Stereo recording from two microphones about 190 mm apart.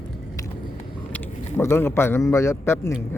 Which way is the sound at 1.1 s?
10° left (ahead or behind).